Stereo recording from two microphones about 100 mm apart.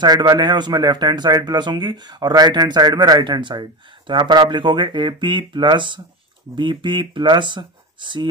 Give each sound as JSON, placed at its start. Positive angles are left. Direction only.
{"t": 0.0, "sound": "a man's voice", "side_deg": -45}